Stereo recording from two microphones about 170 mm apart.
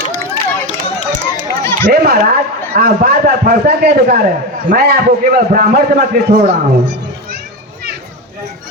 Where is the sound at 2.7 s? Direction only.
65° right (ahead or behind).